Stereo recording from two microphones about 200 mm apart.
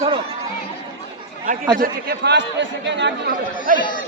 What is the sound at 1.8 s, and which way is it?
Speech, 55° right (ahead or behind).